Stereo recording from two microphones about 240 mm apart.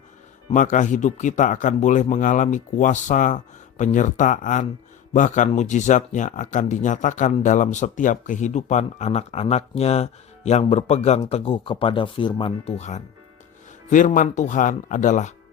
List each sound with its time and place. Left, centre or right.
0.5 s speech: left